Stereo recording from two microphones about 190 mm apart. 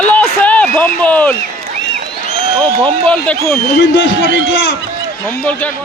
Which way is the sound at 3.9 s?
70° left (ahead or behind).